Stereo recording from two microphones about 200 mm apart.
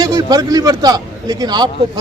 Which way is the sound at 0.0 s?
15° right (ahead or behind).